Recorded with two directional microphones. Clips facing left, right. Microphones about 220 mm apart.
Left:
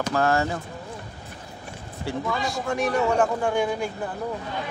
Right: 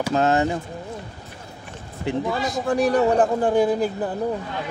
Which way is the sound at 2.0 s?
20° right (ahead or behind).